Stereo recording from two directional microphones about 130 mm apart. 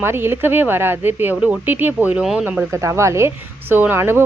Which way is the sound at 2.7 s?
20° right (ahead or behind).